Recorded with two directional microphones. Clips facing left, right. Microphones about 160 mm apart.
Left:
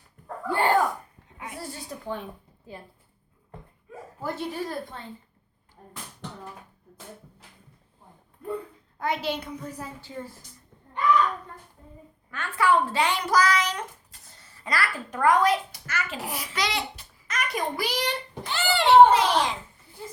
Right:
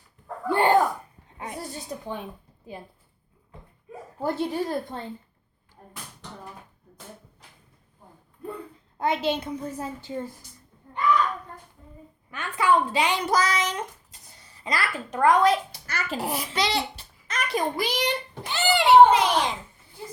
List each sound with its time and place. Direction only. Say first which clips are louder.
0.4 s sneeze: right 3 dB; 20° right (ahead or behind)
1.6 s a sound: right 1 dB; 20° right (ahead or behind)
2.7 s a child's voice: right 3 dB; 15° right (ahead or behind)
4.2 s a woman's voice: right 5 dB; 25° right (ahead or behind)
9.0 s a woman's voice: right 3 dB; 25° right (ahead or behind)
12.3 s a child's voice: even; 20° right (ahead or behind)